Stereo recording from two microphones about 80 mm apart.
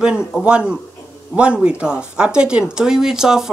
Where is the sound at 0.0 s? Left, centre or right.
Centre.